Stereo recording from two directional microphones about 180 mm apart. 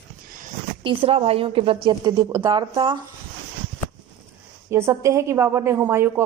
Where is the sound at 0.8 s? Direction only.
30° right (ahead or behind).